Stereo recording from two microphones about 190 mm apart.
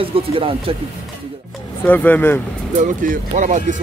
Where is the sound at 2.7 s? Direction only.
45° right (ahead or behind).